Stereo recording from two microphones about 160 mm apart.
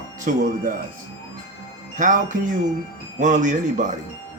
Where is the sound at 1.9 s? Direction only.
50° right (ahead or behind).